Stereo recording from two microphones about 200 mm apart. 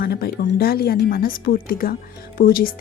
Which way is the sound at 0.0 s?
50° left (ahead or behind).